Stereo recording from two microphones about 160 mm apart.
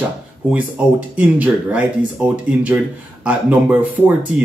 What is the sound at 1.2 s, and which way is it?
Speech, 10° right (ahead or behind).